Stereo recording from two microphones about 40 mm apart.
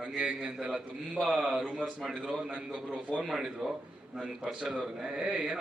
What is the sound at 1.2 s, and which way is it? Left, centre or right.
Speech, centre.